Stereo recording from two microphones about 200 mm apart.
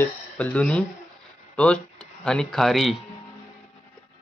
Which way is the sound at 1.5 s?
5° left (ahead or behind).